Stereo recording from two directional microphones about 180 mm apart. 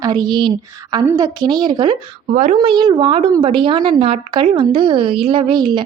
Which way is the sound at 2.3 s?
45° right (ahead or behind).